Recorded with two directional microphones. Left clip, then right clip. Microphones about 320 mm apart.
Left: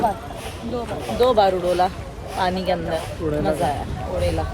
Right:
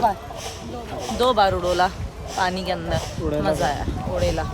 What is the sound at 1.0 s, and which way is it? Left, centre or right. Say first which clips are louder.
Speech: left 2 dB; right.